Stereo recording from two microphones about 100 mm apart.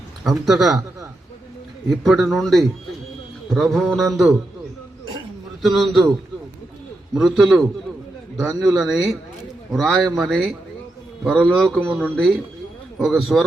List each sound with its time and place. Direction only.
0.3 s a man's voice: centre (ahead or behind)
1.9 s a man's voice: centre (ahead or behind)
5.6 s a man's voice: centre (ahead or behind)